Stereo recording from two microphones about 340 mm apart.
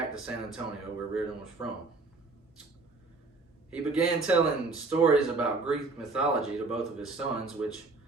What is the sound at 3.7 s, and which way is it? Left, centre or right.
Speech, centre.